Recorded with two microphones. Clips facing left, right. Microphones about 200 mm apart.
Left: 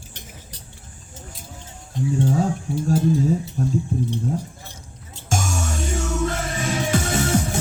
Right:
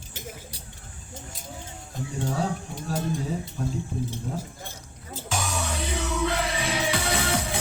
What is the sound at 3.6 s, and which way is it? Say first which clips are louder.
Speech: left 6 dB; 40° left (ahead or behind).